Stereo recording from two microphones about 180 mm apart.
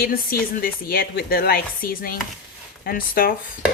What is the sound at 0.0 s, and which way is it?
Chopping, 55° left (ahead or behind).